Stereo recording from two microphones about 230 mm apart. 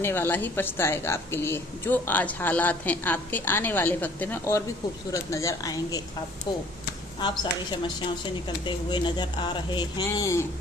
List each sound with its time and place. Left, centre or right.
0.0 s a woman's voice: centre
7.2 s speech: centre